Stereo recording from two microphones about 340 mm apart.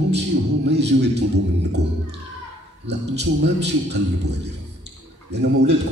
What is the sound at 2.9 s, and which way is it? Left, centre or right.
A man's voice, right.